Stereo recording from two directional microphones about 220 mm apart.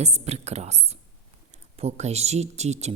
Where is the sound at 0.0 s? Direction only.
30° right (ahead or behind).